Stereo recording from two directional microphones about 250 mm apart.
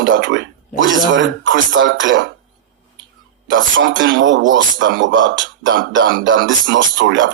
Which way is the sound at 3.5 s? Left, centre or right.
Right.